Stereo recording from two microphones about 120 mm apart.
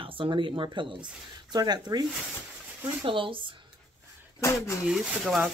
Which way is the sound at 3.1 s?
45° right (ahead or behind).